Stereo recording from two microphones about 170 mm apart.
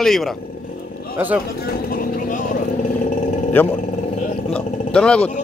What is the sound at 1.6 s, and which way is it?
Vehicle, 60° left (ahead or behind).